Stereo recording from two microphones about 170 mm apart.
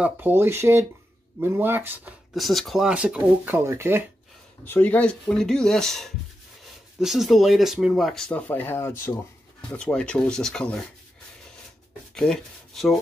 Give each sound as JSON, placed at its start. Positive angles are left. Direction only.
{"t": 0.0, "sound": "speech", "side_deg": -10}
{"t": 2.3, "sound": "speech", "side_deg": 0}
{"t": 4.6, "sound": "speech", "side_deg": 10}
{"t": 12.1, "sound": "speech", "side_deg": 5}